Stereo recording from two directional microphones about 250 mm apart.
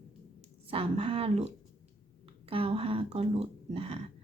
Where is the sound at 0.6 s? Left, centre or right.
Right.